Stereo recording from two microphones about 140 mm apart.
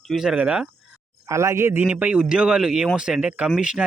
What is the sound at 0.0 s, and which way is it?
Speech, centre (ahead or behind).